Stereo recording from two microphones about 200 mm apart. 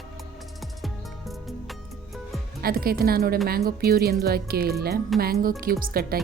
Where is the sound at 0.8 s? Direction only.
Centre (ahead or behind).